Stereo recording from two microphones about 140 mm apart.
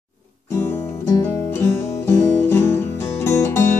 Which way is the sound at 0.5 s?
20° left (ahead or behind).